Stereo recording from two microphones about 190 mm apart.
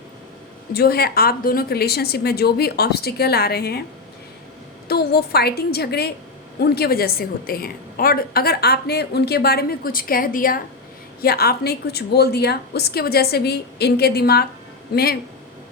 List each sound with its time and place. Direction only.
0.7 s a woman's voice: 55° left (ahead or behind)
4.9 s a woman's voice: 55° left (ahead or behind)